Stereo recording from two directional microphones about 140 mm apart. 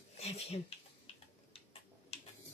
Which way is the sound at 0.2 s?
50° left (ahead or behind).